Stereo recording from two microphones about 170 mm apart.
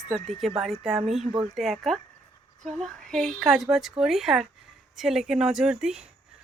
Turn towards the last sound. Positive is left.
turn(degrees=-5)  # may be behind; listen again after turning